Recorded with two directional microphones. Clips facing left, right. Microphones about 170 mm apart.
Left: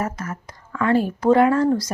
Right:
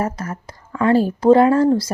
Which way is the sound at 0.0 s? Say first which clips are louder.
Right 3 dB; 35° right (ahead or behind).